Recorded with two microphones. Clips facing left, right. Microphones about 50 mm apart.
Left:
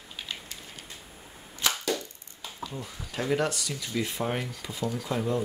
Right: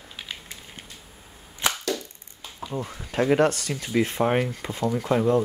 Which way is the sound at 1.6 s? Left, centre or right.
Right.